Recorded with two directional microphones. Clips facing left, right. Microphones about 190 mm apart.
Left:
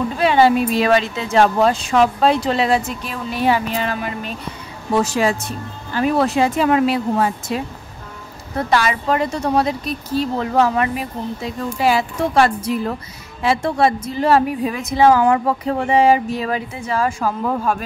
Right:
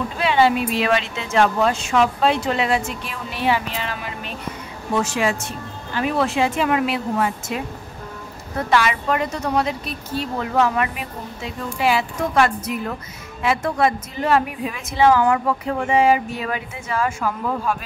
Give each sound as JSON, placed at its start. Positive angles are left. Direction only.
{"t": 0.2, "sound": "a woman's voice", "side_deg": 40}
{"t": 8.6, "sound": "a woman's voice", "side_deg": 35}